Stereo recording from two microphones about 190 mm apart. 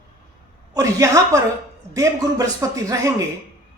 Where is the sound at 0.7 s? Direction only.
15° right (ahead or behind).